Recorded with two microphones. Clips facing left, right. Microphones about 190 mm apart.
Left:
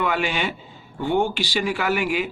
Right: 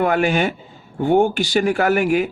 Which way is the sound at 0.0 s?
45° right (ahead or behind).